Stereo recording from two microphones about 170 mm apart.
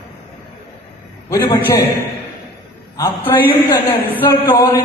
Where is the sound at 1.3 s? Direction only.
25° left (ahead or behind).